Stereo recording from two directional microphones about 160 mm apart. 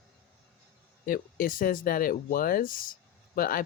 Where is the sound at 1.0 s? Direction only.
60° left (ahead or behind).